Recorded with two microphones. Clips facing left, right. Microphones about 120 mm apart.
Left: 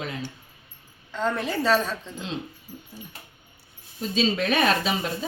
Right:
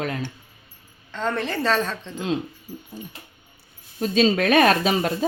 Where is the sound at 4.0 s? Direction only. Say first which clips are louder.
Right 5 dB; 60° right (ahead or behind).